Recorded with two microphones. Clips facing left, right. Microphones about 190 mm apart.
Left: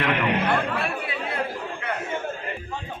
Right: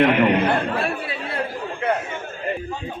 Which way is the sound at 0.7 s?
30° right (ahead or behind).